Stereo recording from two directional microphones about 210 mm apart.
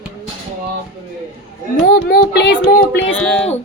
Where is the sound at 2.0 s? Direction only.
50° left (ahead or behind).